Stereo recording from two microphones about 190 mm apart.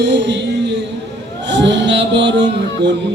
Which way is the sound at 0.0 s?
65° right (ahead or behind).